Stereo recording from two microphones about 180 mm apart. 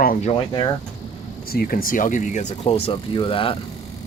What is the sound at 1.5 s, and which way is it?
Speech, 55° left (ahead or behind).